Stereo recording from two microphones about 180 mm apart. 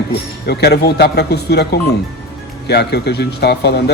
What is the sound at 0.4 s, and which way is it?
Speech, 65° left (ahead or behind).